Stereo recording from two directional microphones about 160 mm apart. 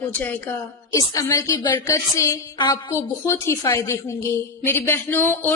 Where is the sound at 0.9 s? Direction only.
20° left (ahead or behind).